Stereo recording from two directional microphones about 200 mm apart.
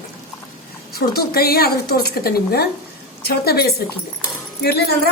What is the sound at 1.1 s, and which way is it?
Speech, 50° left (ahead or behind).